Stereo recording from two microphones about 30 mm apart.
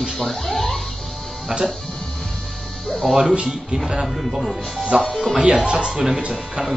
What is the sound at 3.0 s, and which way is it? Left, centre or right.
Speech, centre.